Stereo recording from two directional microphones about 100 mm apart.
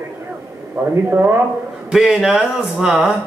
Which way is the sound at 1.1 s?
25° right (ahead or behind).